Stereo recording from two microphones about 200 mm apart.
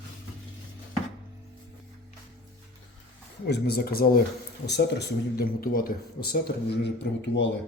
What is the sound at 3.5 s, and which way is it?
Speech, 50° left (ahead or behind).